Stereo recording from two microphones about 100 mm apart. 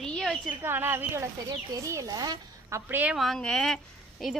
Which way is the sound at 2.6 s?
30° right (ahead or behind).